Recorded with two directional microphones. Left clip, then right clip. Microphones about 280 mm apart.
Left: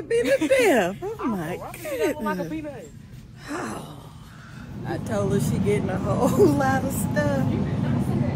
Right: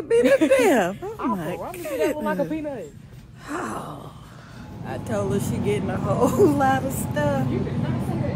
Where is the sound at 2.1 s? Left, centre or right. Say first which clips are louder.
Right 3 dB; right.